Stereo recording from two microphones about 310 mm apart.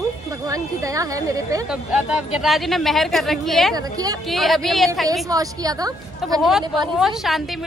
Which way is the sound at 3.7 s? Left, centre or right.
Centre.